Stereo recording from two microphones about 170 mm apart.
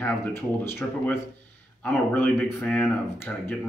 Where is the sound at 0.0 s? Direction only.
10° left (ahead or behind).